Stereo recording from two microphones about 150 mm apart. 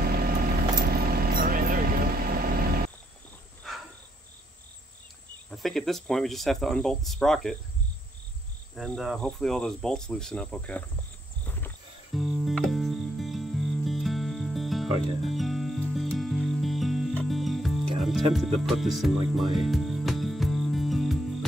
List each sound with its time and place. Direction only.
0.0 s vehicle: 90° right
3.6 s insect: centre (ahead or behind)
5.5 s speech: centre (ahead or behind)
8.7 s speech: centre (ahead or behind)
11.4 s wild animals: 15° left (ahead or behind)
12.1 s music: centre (ahead or behind)